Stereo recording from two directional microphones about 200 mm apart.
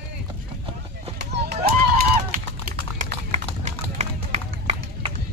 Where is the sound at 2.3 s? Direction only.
40° right (ahead or behind).